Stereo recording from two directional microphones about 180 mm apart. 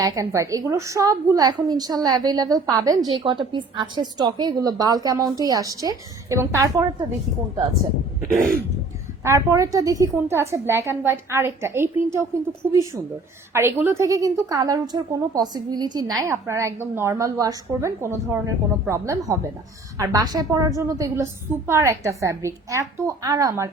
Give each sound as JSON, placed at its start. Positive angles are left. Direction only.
{"t": 0.0, "sound": "a woman's voice", "side_deg": -20}
{"t": 8.4, "sound": "throat clearing", "side_deg": -50}
{"t": 9.2, "sound": "a woman's voice", "side_deg": -15}